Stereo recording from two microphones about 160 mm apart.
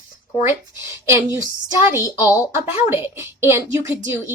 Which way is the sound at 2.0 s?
20° left (ahead or behind).